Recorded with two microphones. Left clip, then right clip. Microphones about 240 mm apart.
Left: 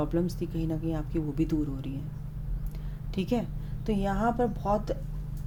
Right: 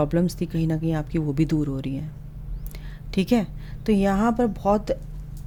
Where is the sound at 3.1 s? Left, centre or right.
Right.